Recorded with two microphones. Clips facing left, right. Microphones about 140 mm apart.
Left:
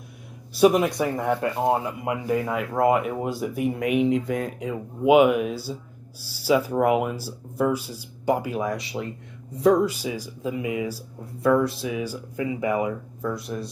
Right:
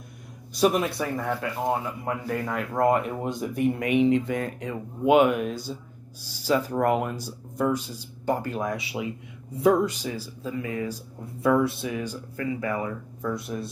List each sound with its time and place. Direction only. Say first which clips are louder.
0.6 s speech: left 4 dB; 10° left (ahead or behind)
1.9 s speech: left 4 dB; 10° left (ahead or behind)
11.4 s speech: left 2 dB; centre (ahead or behind); by 12.9 s 15° left (ahead or behind)
13.2 s speech: even; centre (ahead or behind)